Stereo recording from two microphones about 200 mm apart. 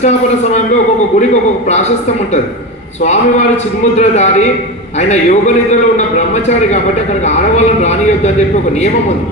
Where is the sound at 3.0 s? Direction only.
40° left (ahead or behind).